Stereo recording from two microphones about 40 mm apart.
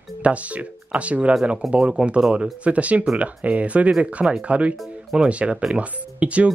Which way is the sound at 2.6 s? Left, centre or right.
Right.